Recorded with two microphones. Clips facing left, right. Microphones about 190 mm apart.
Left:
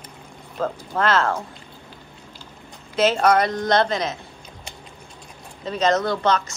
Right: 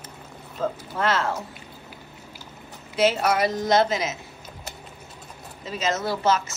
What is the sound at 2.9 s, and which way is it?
A woman's voice, 5° right (ahead or behind).